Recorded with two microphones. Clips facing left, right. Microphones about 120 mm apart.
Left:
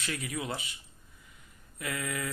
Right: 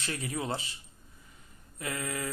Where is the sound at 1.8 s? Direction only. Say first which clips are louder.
Even; 30° right (ahead or behind).